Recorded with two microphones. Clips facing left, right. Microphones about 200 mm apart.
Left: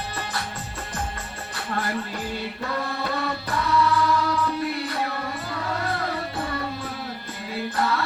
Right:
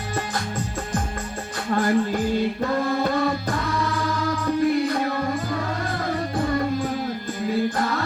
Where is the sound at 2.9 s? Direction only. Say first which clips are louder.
Right 6 dB; 45° right (ahead or behind).